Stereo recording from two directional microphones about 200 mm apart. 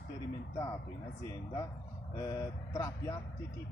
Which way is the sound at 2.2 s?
15° left (ahead or behind).